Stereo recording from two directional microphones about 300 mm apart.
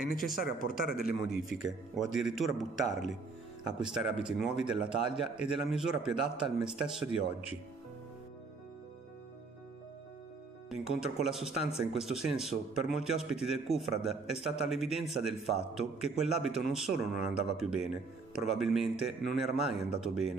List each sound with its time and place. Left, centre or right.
0.0 s speech: left
2.1 s a man's voice: centre
10.7 s a man's voice: centre